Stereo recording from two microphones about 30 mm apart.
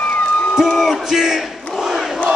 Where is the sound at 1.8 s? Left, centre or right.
Centre.